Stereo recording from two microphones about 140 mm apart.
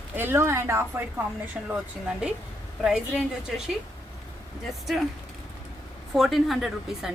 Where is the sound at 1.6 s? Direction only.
5° right (ahead or behind).